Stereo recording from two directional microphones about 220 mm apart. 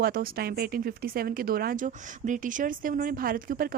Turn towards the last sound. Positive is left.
turn(degrees=-40)  # may be behind; listen again after turning